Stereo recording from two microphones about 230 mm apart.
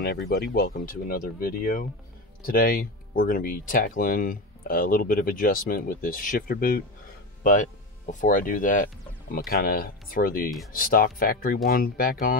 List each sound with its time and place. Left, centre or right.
0.0 s speech: left
8.1 s speech: left